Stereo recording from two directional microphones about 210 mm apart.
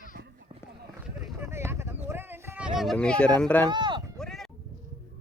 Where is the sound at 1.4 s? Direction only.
10° right (ahead or behind); by 3.3 s 5° left (ahead or behind).